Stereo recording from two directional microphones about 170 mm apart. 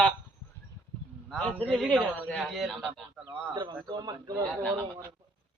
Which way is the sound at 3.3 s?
30° right (ahead or behind).